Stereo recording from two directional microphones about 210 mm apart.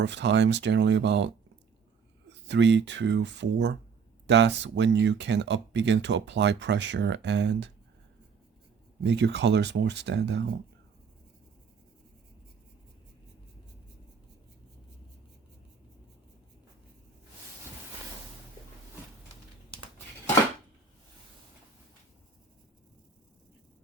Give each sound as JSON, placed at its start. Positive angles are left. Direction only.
{"t": 0.0, "sound": "speech", "side_deg": -55}
{"t": 2.5, "sound": "speech", "side_deg": -60}
{"t": 9.0, "sound": "speech", "side_deg": -55}